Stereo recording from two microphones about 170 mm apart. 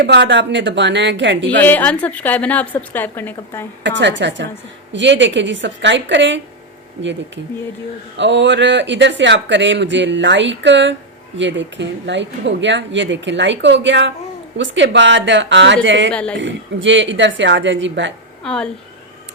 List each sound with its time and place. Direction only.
0.0 s speech: 85° right
1.6 s a woman's voice: 10° left (ahead or behind)
3.8 s speech: 90° right
8.1 s speech: 90° right
18.4 s speech: 5° left (ahead or behind)